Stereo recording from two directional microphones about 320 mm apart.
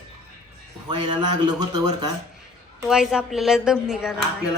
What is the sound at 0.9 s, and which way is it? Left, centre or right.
Speech, centre.